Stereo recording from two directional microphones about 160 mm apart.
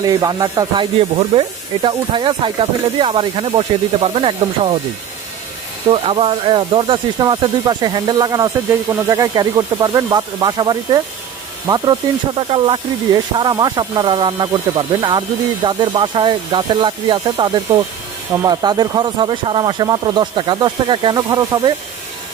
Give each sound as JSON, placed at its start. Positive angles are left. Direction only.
{"t": 0.0, "sound": "speech", "side_deg": -25}
{"t": 5.9, "sound": "speech", "side_deg": -35}
{"t": 12.4, "sound": "speech", "side_deg": -30}